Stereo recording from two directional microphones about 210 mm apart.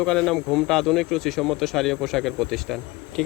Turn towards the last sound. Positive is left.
turn(degrees=0)  # may be behind; listen again after turning